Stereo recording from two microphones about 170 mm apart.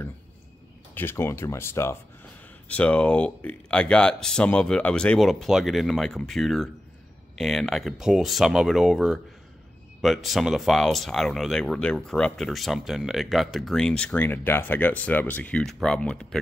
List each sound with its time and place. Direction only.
0.9 s speech: 15° left (ahead or behind)